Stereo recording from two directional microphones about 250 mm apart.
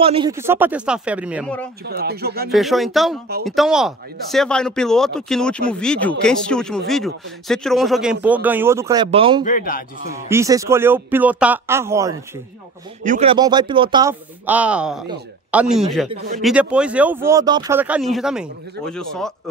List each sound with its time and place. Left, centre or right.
0.0 s speech: right
0.3 s speech: centre
1.9 s speech: right
2.5 s speech: centre
9.4 s a man's voice: left
10.1 s a man's voice: centre
13.0 s speech: right
14.4 s speech: centre